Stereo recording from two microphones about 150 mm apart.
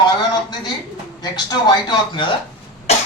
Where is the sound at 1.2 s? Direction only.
30° left (ahead or behind).